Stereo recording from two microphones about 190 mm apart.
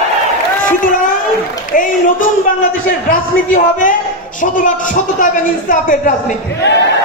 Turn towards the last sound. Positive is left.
turn(degrees=45)  # may be behind; listen again after turning